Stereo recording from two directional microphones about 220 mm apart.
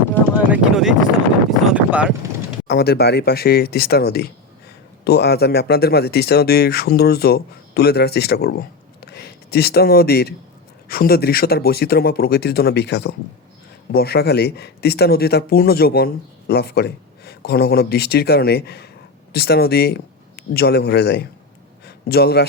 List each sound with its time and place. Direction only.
0.3 s speech: 5° right (ahead or behind)
2.6 s a man's voice: 45° left (ahead or behind)